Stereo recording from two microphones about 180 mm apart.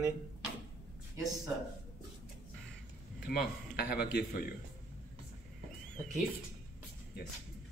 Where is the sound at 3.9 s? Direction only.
60° left (ahead or behind).